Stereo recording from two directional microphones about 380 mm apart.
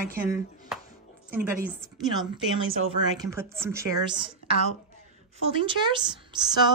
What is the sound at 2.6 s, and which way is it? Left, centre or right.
Speech, right.